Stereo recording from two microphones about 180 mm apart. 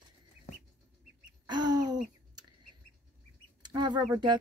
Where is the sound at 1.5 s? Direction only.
20° right (ahead or behind).